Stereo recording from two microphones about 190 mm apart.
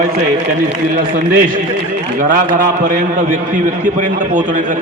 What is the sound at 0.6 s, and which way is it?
A man's voice, 50° right (ahead or behind).